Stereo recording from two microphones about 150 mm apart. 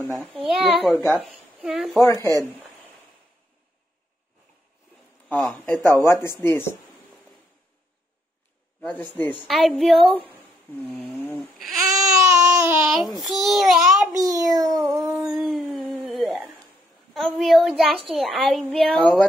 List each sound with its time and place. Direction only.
0.5 s a woman's voice: centre (ahead or behind)
2.1 s speech: 25° right (ahead or behind)
5.3 s speech: 5° left (ahead or behind)
5.9 s speech: 20° left (ahead or behind)
9.2 s speech: 10° left (ahead or behind)
9.5 s a woman's voice: centre (ahead or behind)
11.3 s babbling: centre (ahead or behind)
12.0 s baby cry: 20° right (ahead or behind)
12.8 s a woman's voice: centre (ahead or behind)
14.1 s a child's voice: 25° right (ahead or behind)
15.3 s a sound: centre (ahead or behind)
17.1 s a woman's voice: centre (ahead or behind)